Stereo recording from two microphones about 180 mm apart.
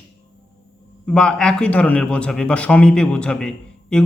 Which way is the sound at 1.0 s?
5° left (ahead or behind).